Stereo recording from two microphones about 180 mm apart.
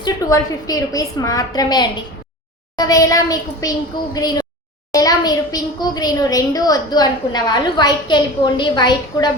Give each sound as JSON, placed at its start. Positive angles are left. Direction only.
{"t": 0.0, "sound": "a child's voice", "side_deg": 20}